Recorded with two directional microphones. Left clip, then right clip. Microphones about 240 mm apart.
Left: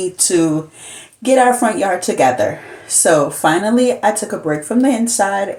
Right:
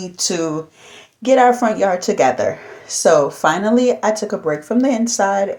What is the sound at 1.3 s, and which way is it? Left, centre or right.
Speech, right.